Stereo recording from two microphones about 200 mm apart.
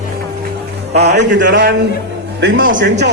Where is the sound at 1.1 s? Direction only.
55° right (ahead or behind).